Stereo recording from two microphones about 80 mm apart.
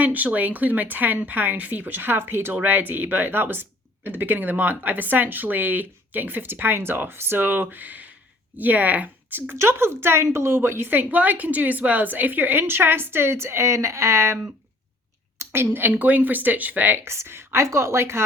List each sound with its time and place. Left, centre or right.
0.0 s speech: centre; by 14.3 s right
15.4 s speech: right